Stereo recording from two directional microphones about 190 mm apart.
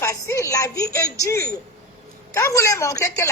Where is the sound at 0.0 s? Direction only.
15° left (ahead or behind).